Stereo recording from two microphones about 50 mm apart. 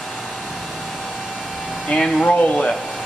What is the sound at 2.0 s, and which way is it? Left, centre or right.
Speech, centre.